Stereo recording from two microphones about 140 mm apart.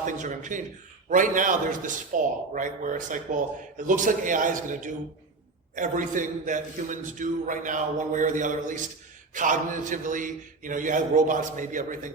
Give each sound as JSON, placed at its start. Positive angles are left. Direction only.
{"t": 0.0, "sound": "a man's voice", "side_deg": -65}